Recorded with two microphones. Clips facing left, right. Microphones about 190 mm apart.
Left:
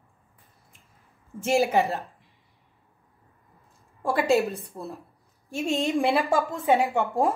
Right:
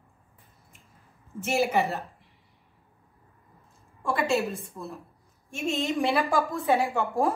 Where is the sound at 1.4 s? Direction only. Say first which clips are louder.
Left 3 dB; 30° left (ahead or behind).